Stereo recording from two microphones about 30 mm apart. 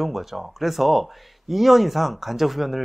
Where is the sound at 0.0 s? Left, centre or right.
Centre.